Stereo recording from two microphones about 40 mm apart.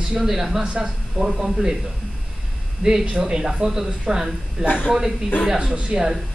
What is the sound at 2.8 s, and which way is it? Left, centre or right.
Speech, centre.